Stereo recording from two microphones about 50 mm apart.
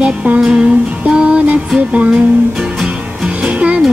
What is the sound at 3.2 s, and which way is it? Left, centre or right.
Music, right.